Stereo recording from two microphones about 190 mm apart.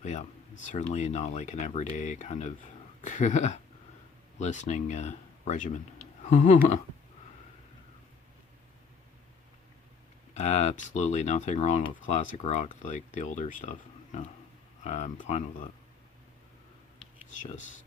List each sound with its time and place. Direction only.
0.0 s speech: 40° left (ahead or behind)
10.3 s speech: 35° left (ahead or behind)
17.4 s speech: 40° left (ahead or behind)